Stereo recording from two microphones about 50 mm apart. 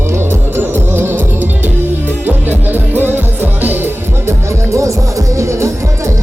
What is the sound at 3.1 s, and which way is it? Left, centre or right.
Music, right.